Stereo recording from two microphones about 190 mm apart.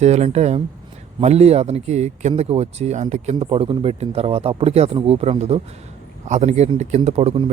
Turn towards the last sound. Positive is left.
turn(degrees=-30)  # may be behind; listen again after turning